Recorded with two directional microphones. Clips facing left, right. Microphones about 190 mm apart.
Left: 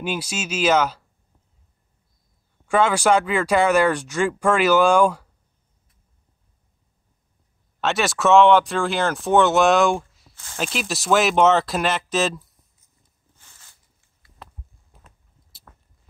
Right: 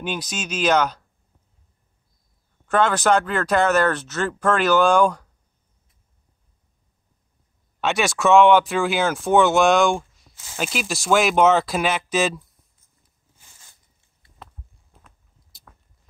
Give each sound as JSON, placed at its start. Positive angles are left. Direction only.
{"t": 0.0, "sound": "speech", "side_deg": 5}
{"t": 2.6, "sound": "speech", "side_deg": 10}
{"t": 7.8, "sound": "speech", "side_deg": 0}
{"t": 13.4, "sound": "a sound", "side_deg": -10}